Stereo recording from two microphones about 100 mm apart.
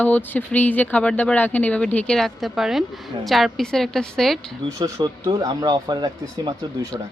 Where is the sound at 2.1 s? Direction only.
Centre (ahead or behind).